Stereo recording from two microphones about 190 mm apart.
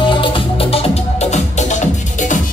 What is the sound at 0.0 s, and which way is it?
Music, 25° left (ahead or behind).